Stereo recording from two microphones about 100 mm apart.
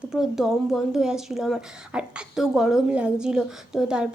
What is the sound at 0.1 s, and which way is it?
A woman's voice, 5° right (ahead or behind).